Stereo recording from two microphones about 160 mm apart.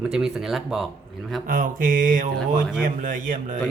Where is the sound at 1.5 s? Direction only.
55° right (ahead or behind).